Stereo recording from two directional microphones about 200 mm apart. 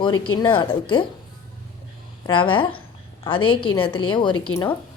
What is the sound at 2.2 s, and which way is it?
A woman's voice, 25° left (ahead or behind).